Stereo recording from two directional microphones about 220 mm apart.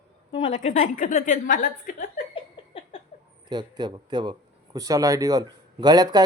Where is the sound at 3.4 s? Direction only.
20° right (ahead or behind).